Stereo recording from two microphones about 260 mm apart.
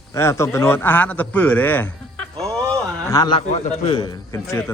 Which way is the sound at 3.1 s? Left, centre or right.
Centre.